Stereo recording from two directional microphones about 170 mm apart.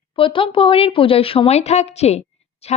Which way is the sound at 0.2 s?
30° left (ahead or behind).